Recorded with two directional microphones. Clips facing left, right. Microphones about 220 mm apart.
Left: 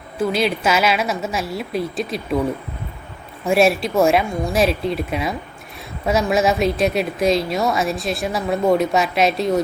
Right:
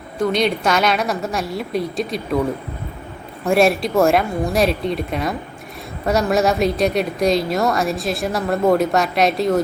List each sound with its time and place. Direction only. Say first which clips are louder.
0.2 s a woman's voice: right 1 dB; 5° left (ahead or behind)
3.4 s a woman's voice: right 1 dB; centre (ahead or behind)